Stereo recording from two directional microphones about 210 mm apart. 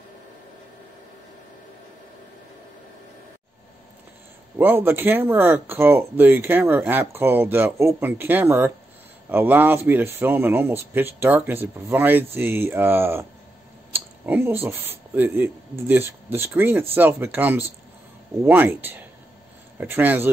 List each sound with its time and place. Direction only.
4.6 s speech: 10° right (ahead or behind)